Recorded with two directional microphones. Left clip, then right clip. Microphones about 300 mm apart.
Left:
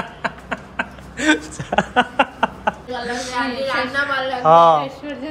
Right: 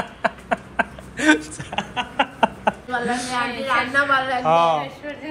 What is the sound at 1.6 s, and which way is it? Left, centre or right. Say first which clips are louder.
Speech: left 10 dB; centre.